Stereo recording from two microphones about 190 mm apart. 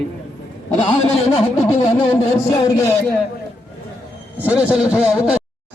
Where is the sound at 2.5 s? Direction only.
20° left (ahead or behind).